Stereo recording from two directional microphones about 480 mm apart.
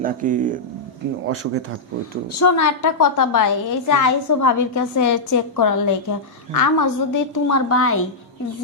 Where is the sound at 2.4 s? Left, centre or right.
Left.